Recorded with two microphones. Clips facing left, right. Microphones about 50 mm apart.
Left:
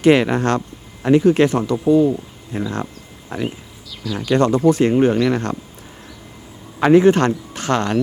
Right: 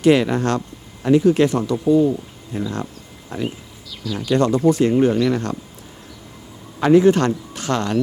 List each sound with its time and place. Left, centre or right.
0.0 s speech: left
3.8 s speech: centre
4.3 s speech: left
6.7 s speech: left